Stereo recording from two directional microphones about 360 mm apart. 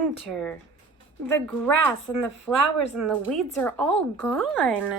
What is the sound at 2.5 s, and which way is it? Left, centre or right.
A woman's voice, centre.